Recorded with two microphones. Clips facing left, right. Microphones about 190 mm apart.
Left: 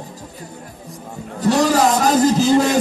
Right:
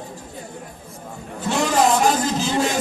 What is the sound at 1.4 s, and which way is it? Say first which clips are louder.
A man's voice: left 4 dB; 40° left (ahead or behind).